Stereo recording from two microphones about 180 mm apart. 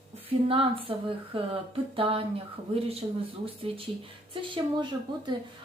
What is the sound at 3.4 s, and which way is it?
Speech, 30° right (ahead or behind).